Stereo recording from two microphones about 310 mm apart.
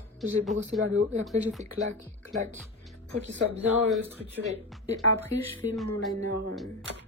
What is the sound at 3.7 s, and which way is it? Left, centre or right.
Speech, centre.